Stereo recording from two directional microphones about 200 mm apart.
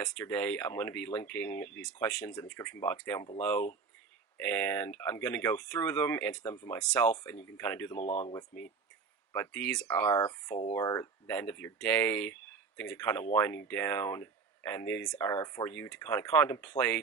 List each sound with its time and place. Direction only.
0.1 s speech: 10° left (ahead or behind)
8.0 s speech: 30° left (ahead or behind)
8.3 s speech: 10° left (ahead or behind)